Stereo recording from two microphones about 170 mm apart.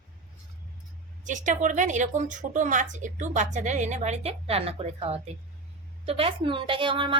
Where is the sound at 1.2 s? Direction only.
45° right (ahead or behind).